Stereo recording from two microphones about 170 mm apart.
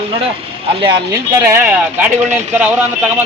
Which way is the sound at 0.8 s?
15° right (ahead or behind).